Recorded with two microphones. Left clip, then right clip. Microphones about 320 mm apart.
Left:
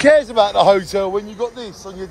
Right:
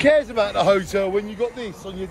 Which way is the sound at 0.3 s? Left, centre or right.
Centre.